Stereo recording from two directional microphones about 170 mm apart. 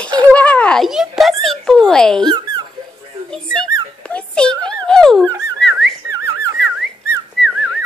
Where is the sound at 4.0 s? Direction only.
5° left (ahead or behind).